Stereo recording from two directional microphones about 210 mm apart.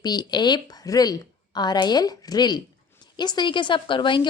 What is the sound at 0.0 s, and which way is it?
A woman's voice, 20° left (ahead or behind).